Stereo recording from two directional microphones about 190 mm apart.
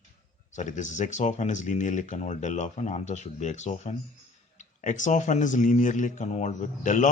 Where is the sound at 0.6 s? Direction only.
40° left (ahead or behind).